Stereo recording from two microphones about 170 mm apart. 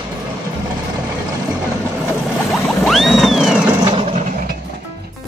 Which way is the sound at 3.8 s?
25° right (ahead or behind).